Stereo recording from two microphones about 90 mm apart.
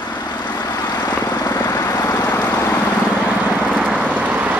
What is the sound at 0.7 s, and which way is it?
Vehicle, 50° left (ahead or behind).